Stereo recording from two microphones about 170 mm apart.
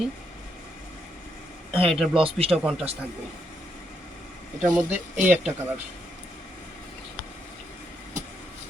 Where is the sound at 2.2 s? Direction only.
35° right (ahead or behind).